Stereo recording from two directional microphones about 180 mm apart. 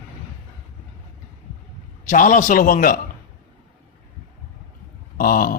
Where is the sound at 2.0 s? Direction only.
45° left (ahead or behind).